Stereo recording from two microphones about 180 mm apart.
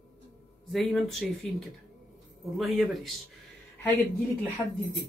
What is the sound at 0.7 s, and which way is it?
A woman's voice, centre (ahead or behind).